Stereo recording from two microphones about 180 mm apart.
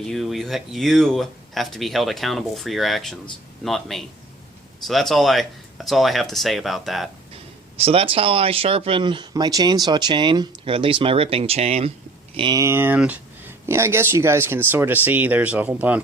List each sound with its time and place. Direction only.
0.0 s speech: centre (ahead or behind)
7.8 s speech: 30° right (ahead or behind)
12.4 s speech: 20° right (ahead or behind)